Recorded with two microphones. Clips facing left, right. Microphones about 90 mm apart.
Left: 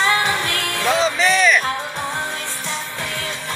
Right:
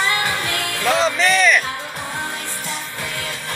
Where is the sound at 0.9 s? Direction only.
Centre (ahead or behind).